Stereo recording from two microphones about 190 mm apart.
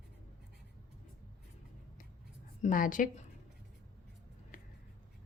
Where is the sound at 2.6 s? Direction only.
45° left (ahead or behind).